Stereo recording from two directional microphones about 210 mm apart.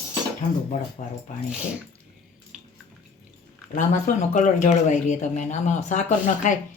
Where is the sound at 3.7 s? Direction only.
35° left (ahead or behind).